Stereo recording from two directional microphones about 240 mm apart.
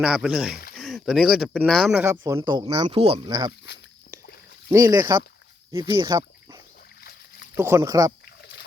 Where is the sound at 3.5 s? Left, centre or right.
Left.